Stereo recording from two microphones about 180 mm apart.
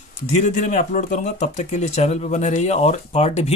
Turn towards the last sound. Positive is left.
turn(degrees=35)  # may be behind; listen again after turning